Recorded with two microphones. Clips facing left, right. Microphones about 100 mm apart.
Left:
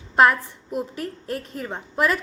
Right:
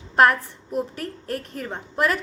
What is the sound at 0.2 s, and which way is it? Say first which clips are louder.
Speech: even; 5° left (ahead or behind).